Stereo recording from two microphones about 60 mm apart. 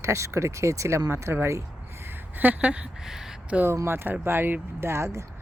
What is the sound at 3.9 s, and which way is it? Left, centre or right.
Speech, right.